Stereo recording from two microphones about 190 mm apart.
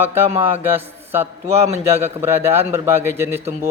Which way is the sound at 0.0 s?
10° right (ahead or behind).